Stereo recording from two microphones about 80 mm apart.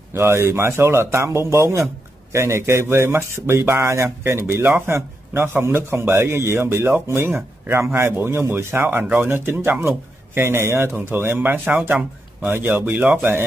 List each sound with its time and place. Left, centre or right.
0.1 s speech: right